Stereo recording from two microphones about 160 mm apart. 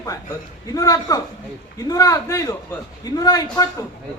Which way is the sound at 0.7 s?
20° left (ahead or behind).